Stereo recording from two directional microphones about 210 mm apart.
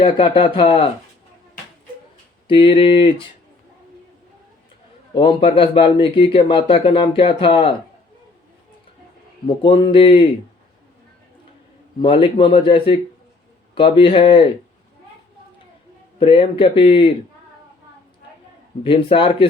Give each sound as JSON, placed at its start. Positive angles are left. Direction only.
{"t": 0.0, "sound": "speech", "side_deg": 25}
{"t": 2.5, "sound": "speech", "side_deg": 25}
{"t": 5.1, "sound": "speech", "side_deg": 25}
{"t": 9.5, "sound": "speech", "side_deg": 25}
{"t": 11.9, "sound": "speech", "side_deg": 25}
{"t": 16.2, "sound": "speech", "side_deg": 25}
{"t": 18.8, "sound": "speech", "side_deg": 25}